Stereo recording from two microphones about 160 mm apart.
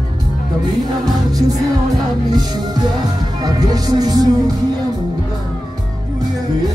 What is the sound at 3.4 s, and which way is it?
Music, 25° right (ahead or behind).